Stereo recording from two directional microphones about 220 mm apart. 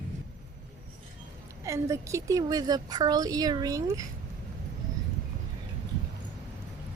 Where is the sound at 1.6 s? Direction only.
15° right (ahead or behind).